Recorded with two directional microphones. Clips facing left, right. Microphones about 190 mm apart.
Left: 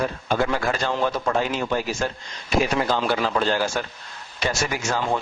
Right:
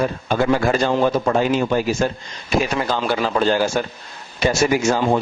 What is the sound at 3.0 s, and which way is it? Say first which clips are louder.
A man's voice: right 3 dB; 10° right (ahead or behind).